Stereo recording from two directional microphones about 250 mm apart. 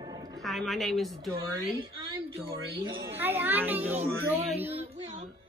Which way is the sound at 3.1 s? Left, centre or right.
Centre.